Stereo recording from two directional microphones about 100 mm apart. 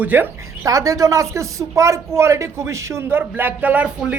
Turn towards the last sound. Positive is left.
turn(degrees=-15)  # may be behind; listen again after turning